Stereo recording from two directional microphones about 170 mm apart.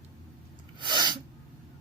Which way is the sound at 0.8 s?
25° right (ahead or behind).